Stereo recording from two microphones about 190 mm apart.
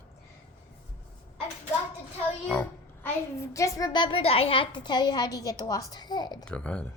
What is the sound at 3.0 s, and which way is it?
A woman's voice, 15° left (ahead or behind).